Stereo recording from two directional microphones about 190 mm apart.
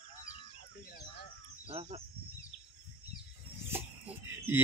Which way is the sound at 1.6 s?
30° right (ahead or behind).